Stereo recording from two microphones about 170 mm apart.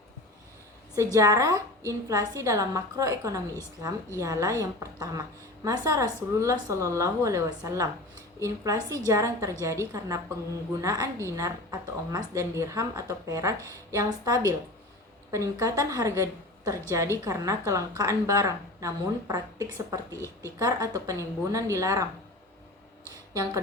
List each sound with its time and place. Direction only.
0.9 s a woman's voice: 20° right (ahead or behind)